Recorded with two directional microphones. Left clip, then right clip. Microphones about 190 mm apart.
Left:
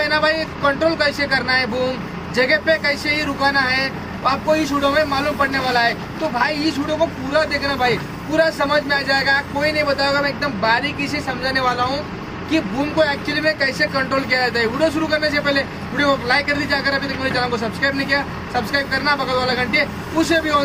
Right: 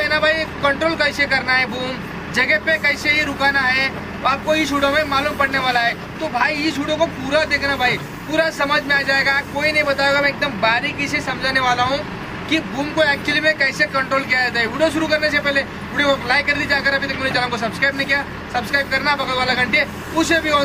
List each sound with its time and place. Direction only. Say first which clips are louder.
0.0 s speech: even; 5° left (ahead or behind)